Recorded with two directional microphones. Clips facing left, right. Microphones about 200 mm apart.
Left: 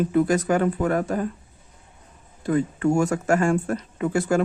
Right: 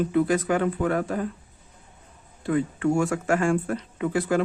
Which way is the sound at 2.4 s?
40° left (ahead or behind).